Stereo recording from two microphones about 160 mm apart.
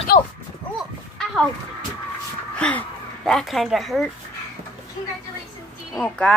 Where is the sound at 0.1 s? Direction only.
60° left (ahead or behind).